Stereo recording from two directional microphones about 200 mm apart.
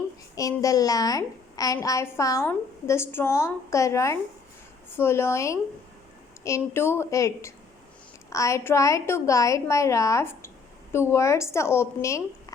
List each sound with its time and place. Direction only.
0.3 s a woman's voice: 15° left (ahead or behind)